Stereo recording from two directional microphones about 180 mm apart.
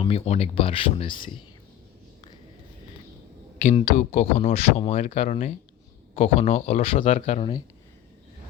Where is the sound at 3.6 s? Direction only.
35° left (ahead or behind).